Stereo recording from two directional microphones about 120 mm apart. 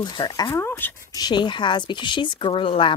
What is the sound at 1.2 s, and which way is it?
Speech, 35° left (ahead or behind).